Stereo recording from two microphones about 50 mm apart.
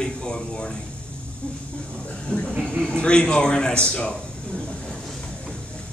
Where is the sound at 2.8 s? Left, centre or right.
Centre.